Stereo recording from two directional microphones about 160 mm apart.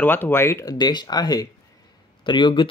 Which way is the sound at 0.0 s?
10° left (ahead or behind).